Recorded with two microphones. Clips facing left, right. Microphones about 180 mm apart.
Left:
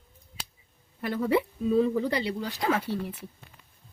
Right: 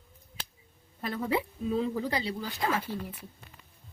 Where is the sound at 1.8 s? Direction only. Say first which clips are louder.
Left 5 dB; 65° left (ahead or behind).